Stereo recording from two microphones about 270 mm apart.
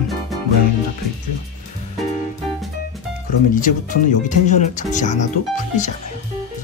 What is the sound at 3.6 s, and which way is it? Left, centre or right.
Speech, left.